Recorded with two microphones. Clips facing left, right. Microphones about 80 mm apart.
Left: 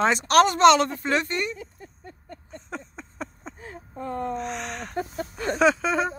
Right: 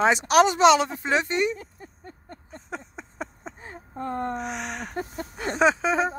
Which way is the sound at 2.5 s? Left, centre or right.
Centre.